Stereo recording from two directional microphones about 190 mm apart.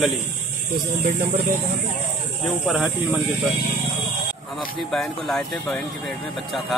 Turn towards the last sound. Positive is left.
turn(degrees=5)  # may be behind; listen again after turning